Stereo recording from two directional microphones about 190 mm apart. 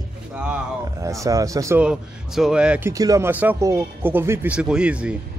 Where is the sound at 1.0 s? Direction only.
15° right (ahead or behind).